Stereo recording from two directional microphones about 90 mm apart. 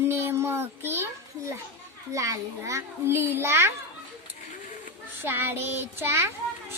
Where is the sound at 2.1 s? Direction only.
35° right (ahead or behind).